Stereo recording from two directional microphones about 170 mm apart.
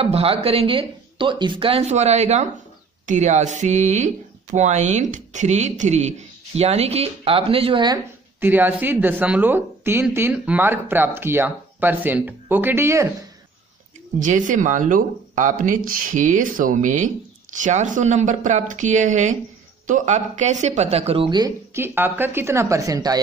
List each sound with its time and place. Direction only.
0.0 s speech: 35° right (ahead or behind)
8.4 s speech: 10° right (ahead or behind)
14.2 s a woman's voice: 50° right (ahead or behind); by 23.2 s 20° right (ahead or behind)